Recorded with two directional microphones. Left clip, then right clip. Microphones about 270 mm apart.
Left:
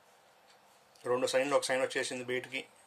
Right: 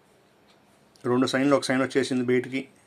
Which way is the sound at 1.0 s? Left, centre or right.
Centre.